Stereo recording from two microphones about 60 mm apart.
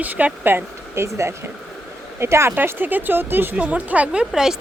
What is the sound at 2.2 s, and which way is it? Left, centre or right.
Speech, right.